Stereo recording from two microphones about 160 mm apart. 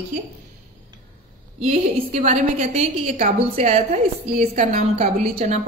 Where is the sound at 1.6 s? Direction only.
45° right (ahead or behind).